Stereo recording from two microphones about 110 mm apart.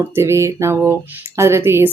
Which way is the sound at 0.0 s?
20° right (ahead or behind).